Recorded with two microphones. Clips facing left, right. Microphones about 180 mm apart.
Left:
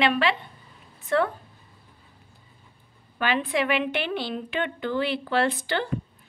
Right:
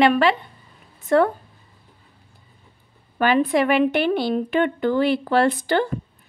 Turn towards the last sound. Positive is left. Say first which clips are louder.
# right 6 dB
turn(degrees=-45)  # may be behind; listen again after turning